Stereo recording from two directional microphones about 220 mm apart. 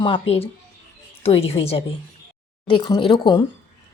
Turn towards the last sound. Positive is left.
turn(degrees=20)  # may be behind; listen again after turning